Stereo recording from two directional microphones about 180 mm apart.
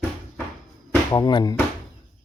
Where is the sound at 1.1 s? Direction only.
25° left (ahead or behind).